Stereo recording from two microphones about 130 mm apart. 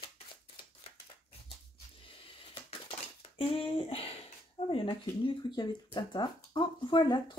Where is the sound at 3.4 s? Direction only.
45° left (ahead or behind).